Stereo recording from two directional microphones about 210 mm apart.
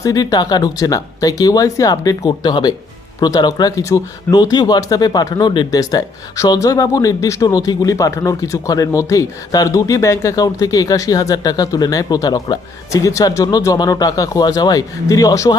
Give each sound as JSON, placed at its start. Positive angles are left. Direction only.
{"t": 0.0, "sound": "speech", "side_deg": 15}